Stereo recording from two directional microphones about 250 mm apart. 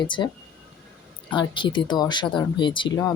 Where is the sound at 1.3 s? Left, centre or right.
Centre.